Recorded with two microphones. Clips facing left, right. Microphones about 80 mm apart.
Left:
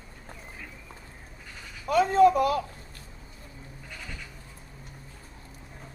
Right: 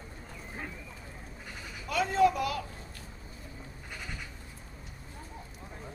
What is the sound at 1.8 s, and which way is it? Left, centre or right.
Speech, left.